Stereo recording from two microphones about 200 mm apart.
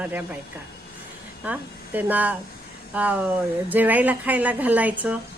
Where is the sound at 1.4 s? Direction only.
10° right (ahead or behind).